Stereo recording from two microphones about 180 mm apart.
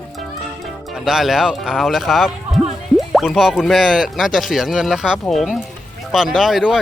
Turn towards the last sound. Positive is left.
turn(degrees=0)  # may be behind; listen again after turning